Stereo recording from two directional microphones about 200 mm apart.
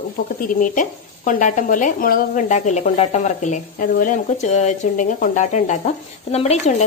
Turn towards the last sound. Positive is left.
turn(degrees=30)  # may be behind; listen again after turning